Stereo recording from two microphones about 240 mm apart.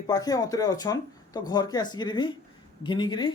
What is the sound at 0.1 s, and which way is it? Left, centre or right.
Speech, centre.